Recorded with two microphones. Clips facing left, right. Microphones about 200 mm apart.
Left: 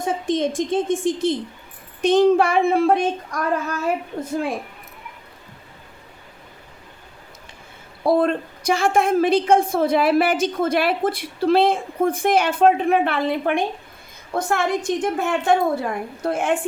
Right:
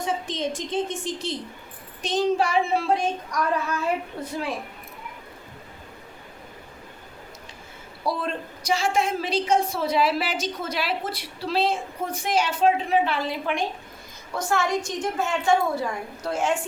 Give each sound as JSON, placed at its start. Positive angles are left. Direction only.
{"t": 0.0, "sound": "a woman's voice", "side_deg": 50}
{"t": 8.0, "sound": "a woman's voice", "side_deg": 55}